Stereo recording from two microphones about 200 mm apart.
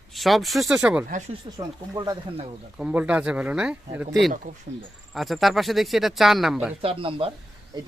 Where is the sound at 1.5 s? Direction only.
20° right (ahead or behind).